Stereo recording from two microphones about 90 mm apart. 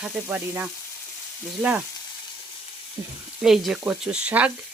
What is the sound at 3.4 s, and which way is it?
Sizzle, 5° right (ahead or behind).